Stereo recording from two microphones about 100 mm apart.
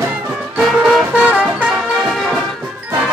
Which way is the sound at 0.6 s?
5° right (ahead or behind).